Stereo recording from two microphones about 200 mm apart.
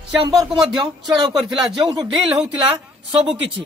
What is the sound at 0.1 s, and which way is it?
Speech, centre (ahead or behind).